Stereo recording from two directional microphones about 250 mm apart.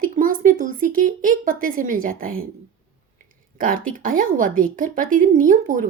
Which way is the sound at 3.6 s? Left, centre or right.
Right.